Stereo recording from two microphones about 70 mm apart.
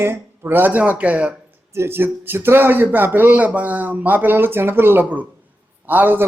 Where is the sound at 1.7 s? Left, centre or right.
Right.